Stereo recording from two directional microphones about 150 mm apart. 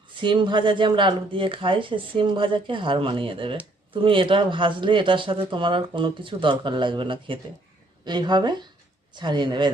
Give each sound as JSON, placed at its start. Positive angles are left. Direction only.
{"t": 0.1, "sound": "speech", "side_deg": -30}